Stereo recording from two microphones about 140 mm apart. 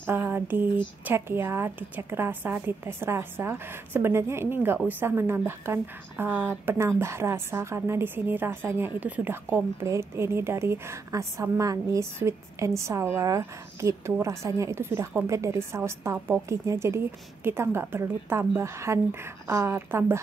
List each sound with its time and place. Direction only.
0.0 s a woman's voice: 15° right (ahead or behind)